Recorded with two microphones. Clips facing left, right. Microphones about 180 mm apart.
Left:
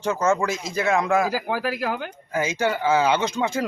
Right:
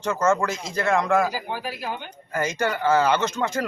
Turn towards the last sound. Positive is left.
turn(degrees=10)  # may be behind; listen again after turning